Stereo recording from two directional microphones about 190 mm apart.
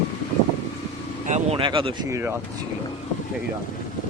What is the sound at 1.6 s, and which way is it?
Speech, 25° right (ahead or behind).